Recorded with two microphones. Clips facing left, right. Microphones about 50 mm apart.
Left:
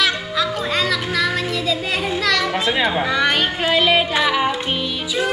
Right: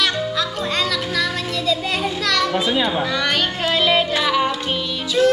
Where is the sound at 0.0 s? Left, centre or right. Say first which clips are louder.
Left 1 dB; centre.